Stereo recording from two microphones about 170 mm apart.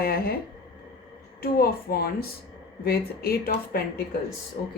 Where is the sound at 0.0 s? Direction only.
60° left (ahead or behind).